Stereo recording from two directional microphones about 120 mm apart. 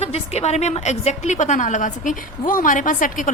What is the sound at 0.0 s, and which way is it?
A woman's voice, 60° left (ahead or behind).